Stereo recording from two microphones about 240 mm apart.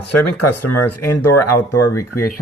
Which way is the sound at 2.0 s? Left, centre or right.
Left.